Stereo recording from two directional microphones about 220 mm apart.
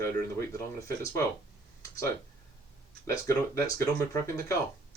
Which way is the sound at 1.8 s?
15° left (ahead or behind).